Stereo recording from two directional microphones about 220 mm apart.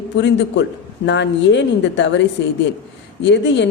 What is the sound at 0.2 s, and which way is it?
A woman's voice, 55° left (ahead or behind).